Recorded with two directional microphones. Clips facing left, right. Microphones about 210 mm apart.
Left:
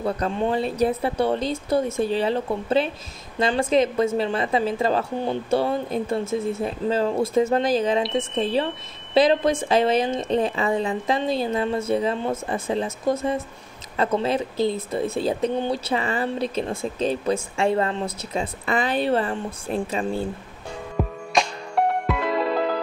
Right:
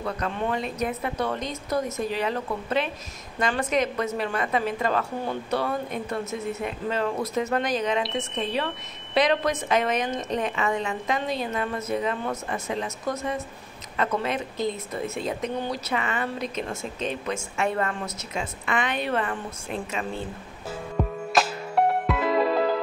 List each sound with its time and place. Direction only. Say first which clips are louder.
0.0 s speech: left 5 dB; 30° left (ahead or behind)
20.9 s music: left 1 dB; centre (ahead or behind)